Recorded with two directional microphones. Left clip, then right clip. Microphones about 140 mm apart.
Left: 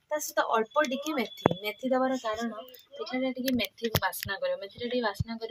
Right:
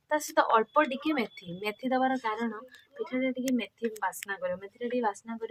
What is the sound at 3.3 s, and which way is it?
Speech, centre (ahead or behind).